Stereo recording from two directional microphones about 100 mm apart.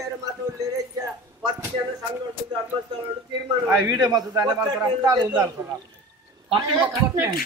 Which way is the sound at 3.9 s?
45° right (ahead or behind).